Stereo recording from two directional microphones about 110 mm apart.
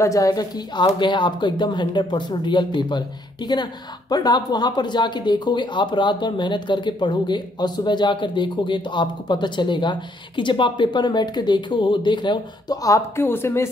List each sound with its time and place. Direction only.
0.0 s speech: 30° left (ahead or behind)
4.1 s speech: 40° left (ahead or behind)
12.8 s speech: 25° left (ahead or behind)